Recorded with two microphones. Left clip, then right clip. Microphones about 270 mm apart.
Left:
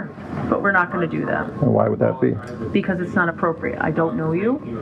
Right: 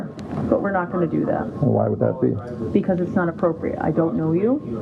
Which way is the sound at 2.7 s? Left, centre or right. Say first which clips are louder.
Even; left.